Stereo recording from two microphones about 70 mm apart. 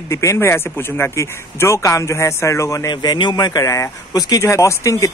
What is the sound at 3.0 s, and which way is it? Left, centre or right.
Speech, left.